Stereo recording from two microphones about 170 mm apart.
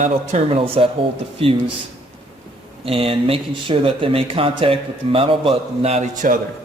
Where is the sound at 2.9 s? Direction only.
30° right (ahead or behind); by 6.4 s 50° right (ahead or behind).